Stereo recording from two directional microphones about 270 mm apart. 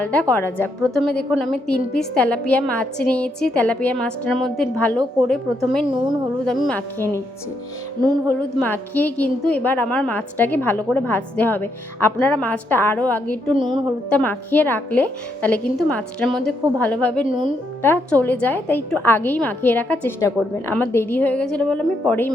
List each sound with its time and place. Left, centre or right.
0.0 s a woman's voice: centre
5.9 s a woman's voice: centre
6.4 s a woman's voice: centre
8.3 s a woman's voice: centre